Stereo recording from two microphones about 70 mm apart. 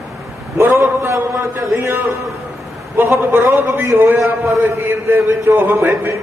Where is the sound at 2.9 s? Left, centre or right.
Right.